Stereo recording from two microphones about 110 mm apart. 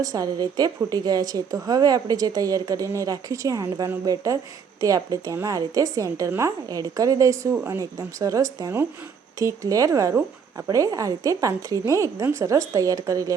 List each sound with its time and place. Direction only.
0.0 s a woman's voice: 35° right (ahead or behind)